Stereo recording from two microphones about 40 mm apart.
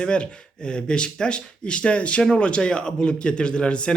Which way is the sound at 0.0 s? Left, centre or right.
Left.